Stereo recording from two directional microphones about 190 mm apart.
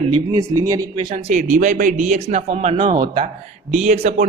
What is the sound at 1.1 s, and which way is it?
Speech, 40° right (ahead or behind).